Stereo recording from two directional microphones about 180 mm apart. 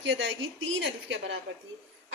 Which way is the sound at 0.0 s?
90° right.